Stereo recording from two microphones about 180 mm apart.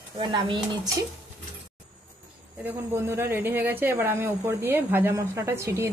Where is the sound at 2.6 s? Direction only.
10° right (ahead or behind).